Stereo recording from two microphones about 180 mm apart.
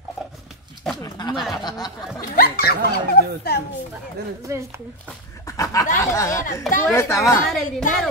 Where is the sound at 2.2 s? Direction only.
55° left (ahead or behind).